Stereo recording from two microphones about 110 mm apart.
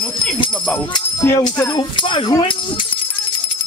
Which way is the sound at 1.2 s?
20° left (ahead or behind).